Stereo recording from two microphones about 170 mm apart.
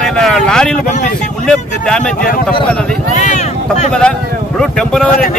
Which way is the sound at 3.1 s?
45° left (ahead or behind).